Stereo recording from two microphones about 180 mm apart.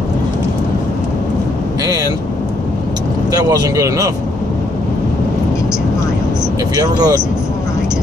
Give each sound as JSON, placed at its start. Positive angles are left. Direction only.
{"t": 3.4, "sound": "speech", "side_deg": -20}
{"t": 6.8, "sound": "speech", "side_deg": -20}